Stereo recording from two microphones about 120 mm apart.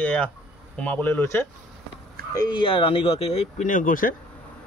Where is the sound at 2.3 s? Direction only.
40° left (ahead or behind); by 3.7 s 65° left (ahead or behind).